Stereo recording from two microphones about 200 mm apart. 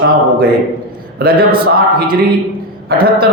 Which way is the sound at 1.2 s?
45° right (ahead or behind).